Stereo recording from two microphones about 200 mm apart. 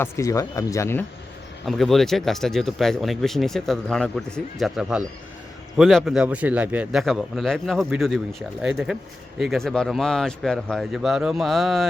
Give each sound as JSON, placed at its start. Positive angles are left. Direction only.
{"t": 0.0, "sound": "speech", "side_deg": 15}
{"t": 1.6, "sound": "a man's voice", "side_deg": 0}